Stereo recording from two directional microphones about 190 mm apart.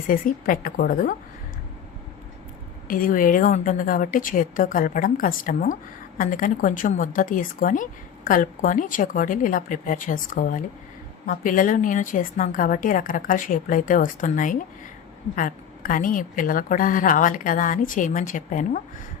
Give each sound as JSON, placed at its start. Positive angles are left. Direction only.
{"t": 0.1, "sound": "a woman's voice", "side_deg": 45}
{"t": 2.8, "sound": "a woman's voice", "side_deg": 45}